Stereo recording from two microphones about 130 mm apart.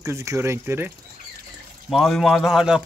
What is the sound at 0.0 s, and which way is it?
Speech, 25° right (ahead or behind).